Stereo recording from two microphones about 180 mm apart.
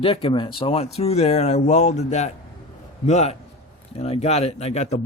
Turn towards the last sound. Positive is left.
turn(degrees=40)  # may be behind; listen again after turning